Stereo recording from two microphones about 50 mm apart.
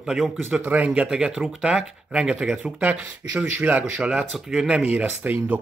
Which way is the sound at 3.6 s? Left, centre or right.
Right.